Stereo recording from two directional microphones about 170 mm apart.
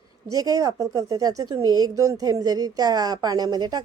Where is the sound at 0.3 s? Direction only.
20° right (ahead or behind).